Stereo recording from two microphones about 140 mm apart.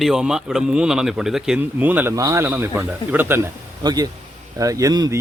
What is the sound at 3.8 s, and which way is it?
Speech, 25° right (ahead or behind).